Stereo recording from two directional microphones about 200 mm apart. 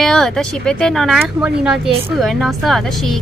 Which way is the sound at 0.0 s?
Centre (ahead or behind).